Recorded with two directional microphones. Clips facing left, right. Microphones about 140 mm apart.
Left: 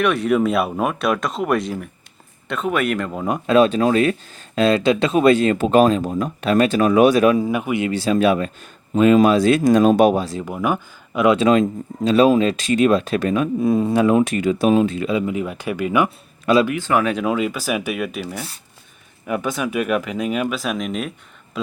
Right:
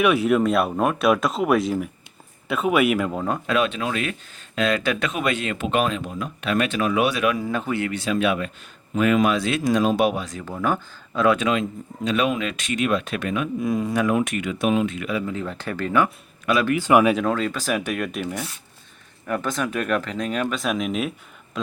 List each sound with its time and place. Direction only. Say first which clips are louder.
0.0 s a man's voice: left 1 dB; 5° right (ahead or behind)
3.4 s speech: left 11 dB; 35° left (ahead or behind)
7.3 s speech: left 5 dB; 15° left (ahead or behind)
7.9 s speech: left 7 dB; 35° left (ahead or behind)
10.4 s speech: left 2 dB; 15° left (ahead or behind)
11.3 s speech: left 7 dB; 40° left (ahead or behind)
15.3 s speech: left 5 dB; 15° left (ahead or behind)
16.7 s a man's voice: right 2 dB; 10° right (ahead or behind)
17.2 s speech: left 2 dB; 10° left (ahead or behind)